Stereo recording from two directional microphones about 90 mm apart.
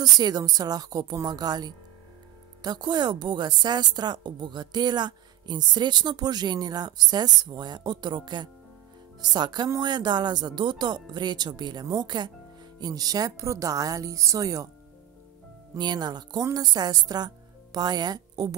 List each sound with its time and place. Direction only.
0.0 s a woman's voice: 45° right (ahead or behind)
15.8 s a woman's voice: 50° right (ahead or behind)